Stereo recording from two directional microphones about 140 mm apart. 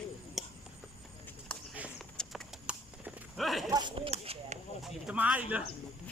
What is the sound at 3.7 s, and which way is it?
Speech, 30° right (ahead or behind).